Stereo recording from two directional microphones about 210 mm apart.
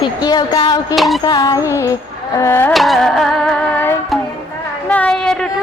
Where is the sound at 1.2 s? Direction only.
15° left (ahead or behind).